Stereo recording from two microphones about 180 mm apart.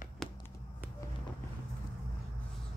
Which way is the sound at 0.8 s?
10° right (ahead or behind).